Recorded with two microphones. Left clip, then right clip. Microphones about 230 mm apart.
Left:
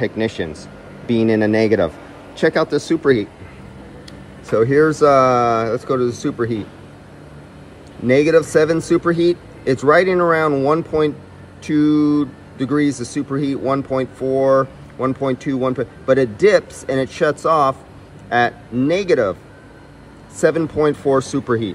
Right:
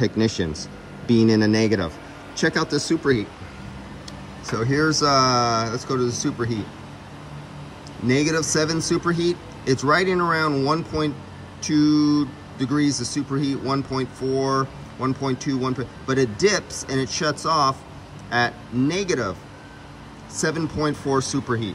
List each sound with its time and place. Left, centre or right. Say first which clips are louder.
0.0 s speech: left 2 dB; centre
4.5 s speech: left 8 dB; centre
8.1 s speech: left 8 dB; centre
20.4 s speech: left 9 dB; centre